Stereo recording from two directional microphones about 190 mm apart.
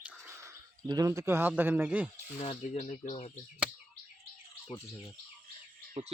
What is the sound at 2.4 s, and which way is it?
Speech, 35° left (ahead or behind).